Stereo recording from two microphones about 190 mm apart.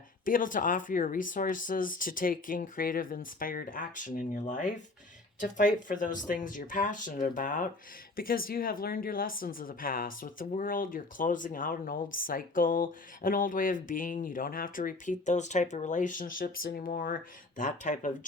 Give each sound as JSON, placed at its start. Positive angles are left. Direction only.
{"t": 0.3, "sound": "speech", "side_deg": 45}